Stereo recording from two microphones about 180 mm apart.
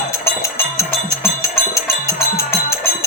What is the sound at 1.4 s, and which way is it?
Music, 15° left (ahead or behind).